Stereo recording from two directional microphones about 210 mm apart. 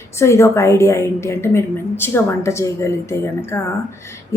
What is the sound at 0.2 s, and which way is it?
A woman's voice, 15° left (ahead or behind).